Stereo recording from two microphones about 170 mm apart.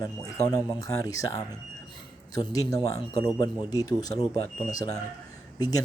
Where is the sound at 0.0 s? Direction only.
20° left (ahead or behind).